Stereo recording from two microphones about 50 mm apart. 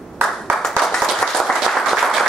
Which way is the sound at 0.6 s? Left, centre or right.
Centre.